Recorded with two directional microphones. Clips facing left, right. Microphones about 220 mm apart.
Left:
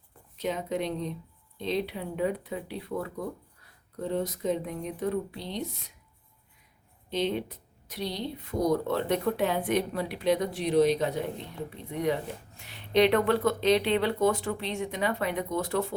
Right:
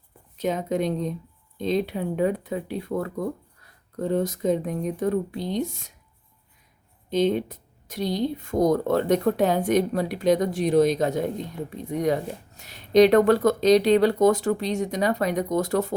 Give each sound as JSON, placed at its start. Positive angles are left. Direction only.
{"t": 0.3, "sound": "speech", "side_deg": -45}
{"t": 7.1, "sound": "speech", "side_deg": -45}